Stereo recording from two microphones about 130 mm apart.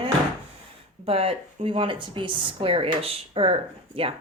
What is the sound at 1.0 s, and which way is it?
A woman's voice, 45° right (ahead or behind).